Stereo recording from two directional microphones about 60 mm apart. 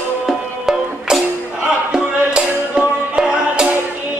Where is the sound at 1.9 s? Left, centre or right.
Centre.